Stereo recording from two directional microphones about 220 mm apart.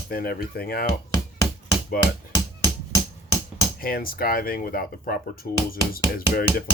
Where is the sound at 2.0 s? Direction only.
40° left (ahead or behind).